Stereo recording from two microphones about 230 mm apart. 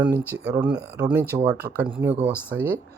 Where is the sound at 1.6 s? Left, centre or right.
Right.